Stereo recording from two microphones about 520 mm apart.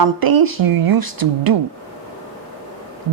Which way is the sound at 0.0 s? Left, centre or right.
Right.